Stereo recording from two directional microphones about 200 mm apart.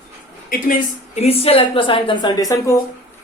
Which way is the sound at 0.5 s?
35° left (ahead or behind).